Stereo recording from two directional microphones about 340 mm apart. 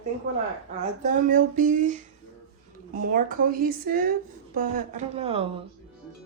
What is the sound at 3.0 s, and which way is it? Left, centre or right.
A woman's voice, right.